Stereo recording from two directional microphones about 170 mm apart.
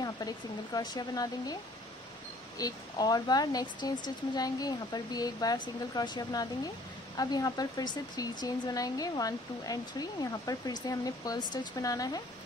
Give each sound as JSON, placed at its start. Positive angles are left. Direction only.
{"t": 0.7, "sound": "speech", "side_deg": 25}
{"t": 2.6, "sound": "speech", "side_deg": 25}